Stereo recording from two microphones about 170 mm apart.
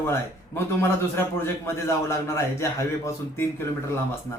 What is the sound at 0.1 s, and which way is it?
A man's voice, 15° left (ahead or behind).